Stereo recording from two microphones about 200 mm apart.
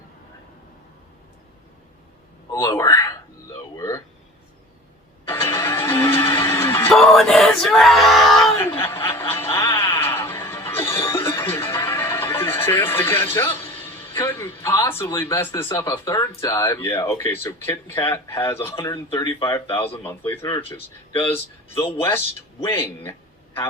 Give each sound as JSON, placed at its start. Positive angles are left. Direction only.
{"t": 2.5, "sound": "a man's voice", "side_deg": 20}
{"t": 3.8, "sound": "a sound", "side_deg": 15}
{"t": 5.5, "sound": "music", "side_deg": 10}
{"t": 6.3, "sound": "neigh", "side_deg": 15}
{"t": 6.9, "sound": "a sound", "side_deg": 0}
{"t": 8.8, "sound": "snicker", "side_deg": 15}
{"t": 9.3, "sound": "music", "side_deg": 10}
{"t": 18.6, "sound": "speech", "side_deg": 15}
{"t": 21.1, "sound": "speech", "side_deg": 25}
{"t": 22.6, "sound": "speech", "side_deg": 10}